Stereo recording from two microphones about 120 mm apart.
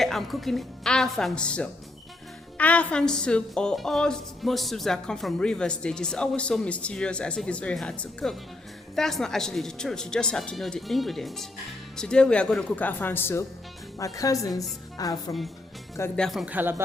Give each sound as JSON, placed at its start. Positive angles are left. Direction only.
{"t": 0.0, "sound": "a woman's voice", "side_deg": 0}
{"t": 14.0, "sound": "a woman's voice", "side_deg": 30}
{"t": 16.1, "sound": "speech", "side_deg": 0}
{"t": 16.5, "sound": "speech", "side_deg": -15}